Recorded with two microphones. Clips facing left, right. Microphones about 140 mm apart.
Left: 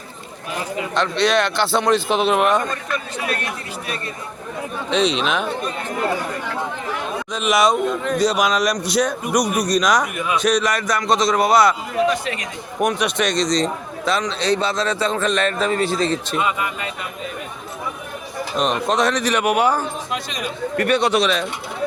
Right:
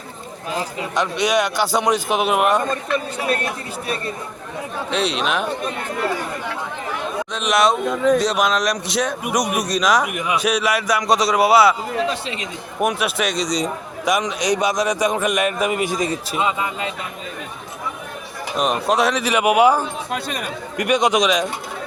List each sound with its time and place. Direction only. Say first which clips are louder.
0.9 s a man's voice: left 1 dB; 15° right (ahead or behind)
2.9 s speech: right 4 dB; 30° right (ahead or behind)
4.9 s speech: left 3 dB; 5° right (ahead or behind)
7.3 s speech: left 1 dB; centre (ahead or behind)
10.1 s a man's voice: left 1 dB; 15° right (ahead or behind)
12.0 s speech: left 4 dB; 25° right (ahead or behind)
12.8 s a man's voice: left 1 dB; 5° right (ahead or behind)
16.4 s speech: right 1 dB; 25° right (ahead or behind)
18.5 s a man's voice: right 1 dB; 5° right (ahead or behind)
20.1 s speech: right 1 dB; 55° right (ahead or behind)
20.7 s a man's voice: even; 10° right (ahead or behind)